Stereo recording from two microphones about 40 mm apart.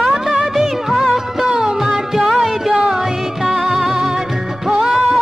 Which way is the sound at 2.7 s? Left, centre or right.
Centre.